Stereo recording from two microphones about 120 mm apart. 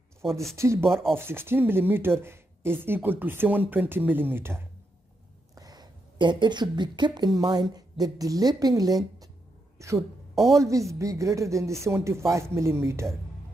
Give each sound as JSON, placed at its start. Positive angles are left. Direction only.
{"t": 0.6, "sound": "a woman's voice", "side_deg": -25}
{"t": 0.8, "sound": "speech", "side_deg": 5}
{"t": 1.1, "sound": "speech", "side_deg": -20}
{"t": 5.5, "sound": "a woman's voice", "side_deg": -30}
{"t": 10.3, "sound": "a woman's voice", "side_deg": 0}
{"t": 10.6, "sound": "a woman's voice", "side_deg": -25}